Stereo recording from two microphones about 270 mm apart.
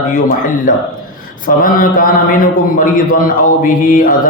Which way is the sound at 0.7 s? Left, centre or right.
Left.